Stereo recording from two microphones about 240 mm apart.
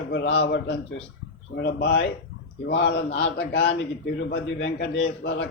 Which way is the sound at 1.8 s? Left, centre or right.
Left.